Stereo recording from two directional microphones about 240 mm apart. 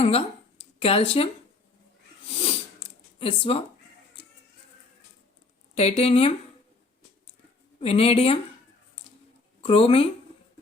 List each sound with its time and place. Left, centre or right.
0.0 s speech: left
2.2 s a sound: left
5.7 s speech: left
7.8 s speech: left
9.6 s speech: left